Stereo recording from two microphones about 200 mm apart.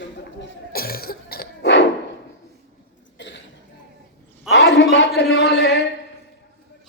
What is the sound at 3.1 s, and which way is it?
Cough, 65° left (ahead or behind).